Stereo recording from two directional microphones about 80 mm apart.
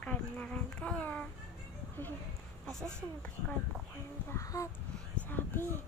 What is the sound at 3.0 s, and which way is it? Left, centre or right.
Speech, centre.